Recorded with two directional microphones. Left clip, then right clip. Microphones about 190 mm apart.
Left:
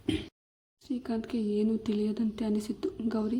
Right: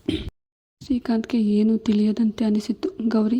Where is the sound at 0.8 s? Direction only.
35° right (ahead or behind).